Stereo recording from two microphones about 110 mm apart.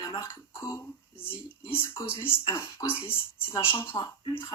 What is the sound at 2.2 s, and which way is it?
Speech, 20° left (ahead or behind).